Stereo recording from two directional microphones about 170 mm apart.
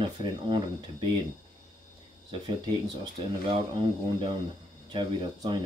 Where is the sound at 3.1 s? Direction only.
30° right (ahead or behind).